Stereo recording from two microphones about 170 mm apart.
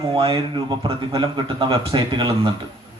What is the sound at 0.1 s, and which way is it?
A man's voice, 30° right (ahead or behind).